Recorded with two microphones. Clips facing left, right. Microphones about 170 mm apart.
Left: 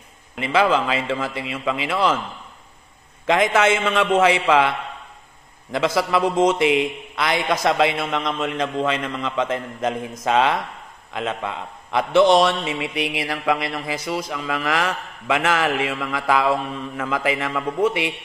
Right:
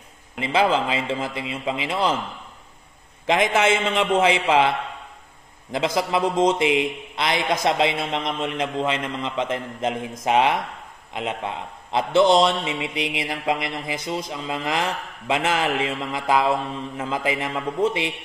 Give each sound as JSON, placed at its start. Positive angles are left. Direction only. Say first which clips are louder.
{"t": 0.4, "sound": "a man's voice", "louder": "left 2 dB", "side_deg": -25}
{"t": 3.5, "sound": "a man's voice", "louder": "left 2 dB", "side_deg": -25}
{"t": 5.9, "sound": "a man's voice", "louder": "left 2 dB", "side_deg": -20}